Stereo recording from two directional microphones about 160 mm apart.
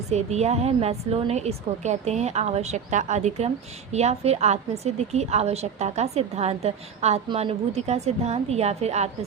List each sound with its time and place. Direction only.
0.1 s a woman's voice: 45° right (ahead or behind)